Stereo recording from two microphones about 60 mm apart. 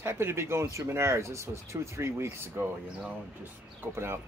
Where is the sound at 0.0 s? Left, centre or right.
Right.